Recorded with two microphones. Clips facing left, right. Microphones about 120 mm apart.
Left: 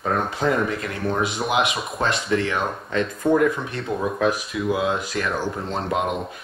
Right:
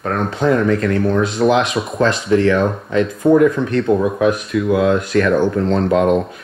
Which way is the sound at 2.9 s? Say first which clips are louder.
Right 7 dB; centre (ahead or behind).